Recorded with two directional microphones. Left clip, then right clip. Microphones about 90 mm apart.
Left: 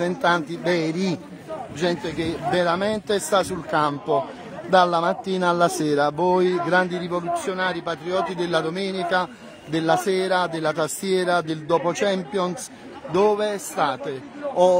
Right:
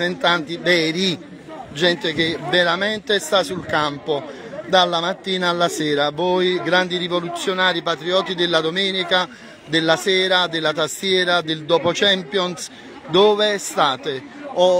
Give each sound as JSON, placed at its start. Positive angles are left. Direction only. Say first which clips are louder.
{"t": 0.0, "sound": "speech", "louder": "right 2 dB", "side_deg": 20}
{"t": 1.8, "sound": "a man's voice", "louder": "right 7 dB", "side_deg": 0}
{"t": 2.2, "sound": "speech", "louder": "right 3 dB", "side_deg": 20}
{"t": 7.4, "sound": "a man's voice", "louder": "right 6 dB", "side_deg": -20}
{"t": 10.0, "sound": "speech", "louder": "right 4 dB", "side_deg": 20}
{"t": 13.1, "sound": "a man's voice", "louder": "right 5 dB", "side_deg": 0}